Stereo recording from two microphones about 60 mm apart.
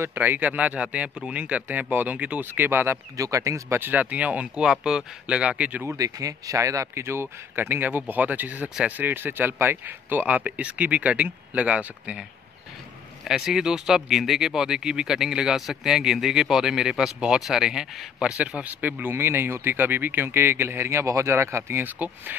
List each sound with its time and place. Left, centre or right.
0.0 s speech: right
3.2 s speech: right
3.7 s speech: right
4.0 s speech: right
4.6 s speech: centre
5.9 s speech: right
7.1 s speech: right
13.2 s speech: centre
18.6 s speech: right
21.8 s speech: right